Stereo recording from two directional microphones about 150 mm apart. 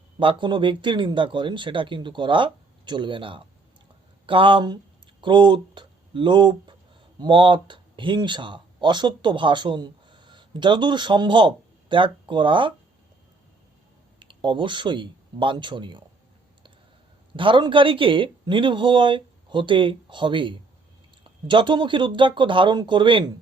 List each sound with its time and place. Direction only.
0.2 s speech: 35° right (ahead or behind)
14.2 s speech: 30° right (ahead or behind)
17.3 s speech: 35° right (ahead or behind)